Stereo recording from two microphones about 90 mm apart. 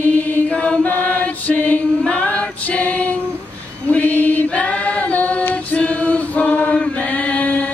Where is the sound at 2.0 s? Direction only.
15° left (ahead or behind).